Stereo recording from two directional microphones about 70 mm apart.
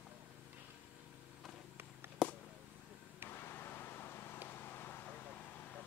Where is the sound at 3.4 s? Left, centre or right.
Left.